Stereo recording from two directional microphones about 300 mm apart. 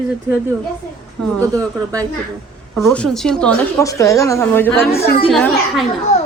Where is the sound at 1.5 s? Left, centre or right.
Centre.